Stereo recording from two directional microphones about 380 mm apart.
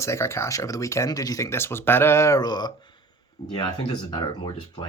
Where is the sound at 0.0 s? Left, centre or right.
Centre.